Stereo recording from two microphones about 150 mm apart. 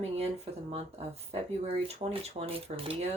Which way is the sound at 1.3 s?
40° right (ahead or behind).